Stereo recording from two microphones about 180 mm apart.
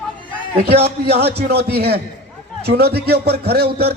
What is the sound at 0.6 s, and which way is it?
A man's voice, 65° right (ahead or behind).